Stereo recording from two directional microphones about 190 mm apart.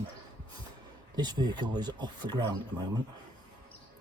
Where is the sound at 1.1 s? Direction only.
20° right (ahead or behind).